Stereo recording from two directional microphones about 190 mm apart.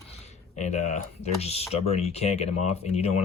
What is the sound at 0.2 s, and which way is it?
Speech, 35° left (ahead or behind).